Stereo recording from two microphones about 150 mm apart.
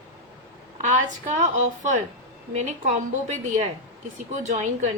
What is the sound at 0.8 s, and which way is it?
A woman's voice, 55° right (ahead or behind).